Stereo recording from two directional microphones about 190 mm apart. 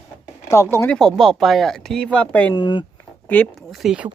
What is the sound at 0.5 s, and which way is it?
Speech, 15° left (ahead or behind).